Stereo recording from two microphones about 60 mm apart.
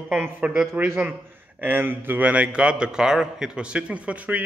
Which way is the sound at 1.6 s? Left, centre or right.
Right.